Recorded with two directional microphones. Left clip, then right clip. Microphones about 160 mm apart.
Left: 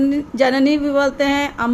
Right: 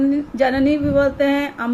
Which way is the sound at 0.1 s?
65° left (ahead or behind).